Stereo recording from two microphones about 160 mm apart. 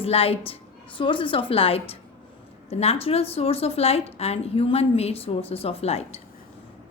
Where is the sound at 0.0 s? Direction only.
35° left (ahead or behind).